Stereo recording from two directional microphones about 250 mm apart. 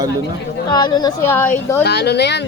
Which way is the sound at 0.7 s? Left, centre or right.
Centre.